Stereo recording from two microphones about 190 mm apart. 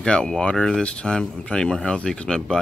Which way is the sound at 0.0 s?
5° left (ahead or behind).